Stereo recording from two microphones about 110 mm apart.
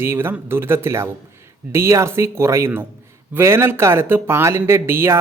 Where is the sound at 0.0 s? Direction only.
20° right (ahead or behind).